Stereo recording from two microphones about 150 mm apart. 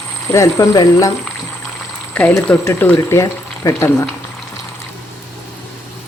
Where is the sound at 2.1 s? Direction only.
10° left (ahead or behind).